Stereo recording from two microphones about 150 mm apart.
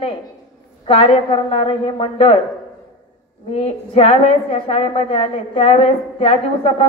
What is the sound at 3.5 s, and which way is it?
A woman's voice, 45° left (ahead or behind).